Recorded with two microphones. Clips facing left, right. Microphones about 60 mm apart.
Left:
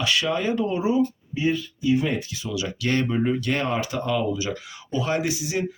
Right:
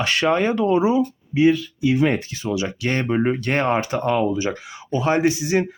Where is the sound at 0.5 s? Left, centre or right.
Right.